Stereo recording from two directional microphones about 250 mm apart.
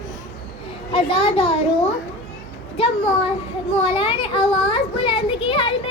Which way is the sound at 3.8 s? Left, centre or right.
Left.